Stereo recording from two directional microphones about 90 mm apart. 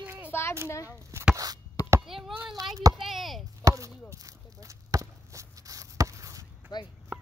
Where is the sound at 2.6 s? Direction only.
45° right (ahead or behind).